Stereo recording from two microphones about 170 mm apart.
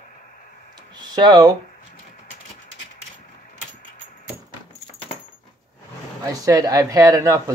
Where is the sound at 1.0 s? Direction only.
25° right (ahead or behind).